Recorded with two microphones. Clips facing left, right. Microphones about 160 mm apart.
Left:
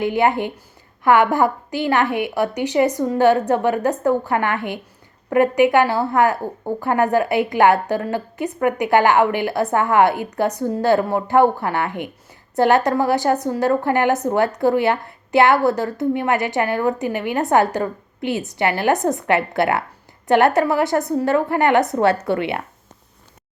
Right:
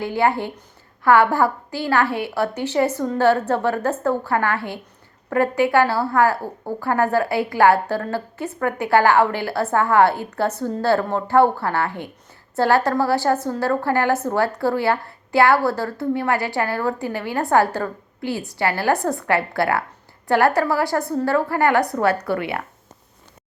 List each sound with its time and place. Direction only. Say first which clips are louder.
0.0 s a woman's voice: left 2 dB; 20° left (ahead or behind)